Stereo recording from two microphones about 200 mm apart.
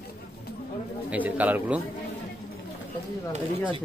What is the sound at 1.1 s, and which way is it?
Speech, 10° right (ahead or behind).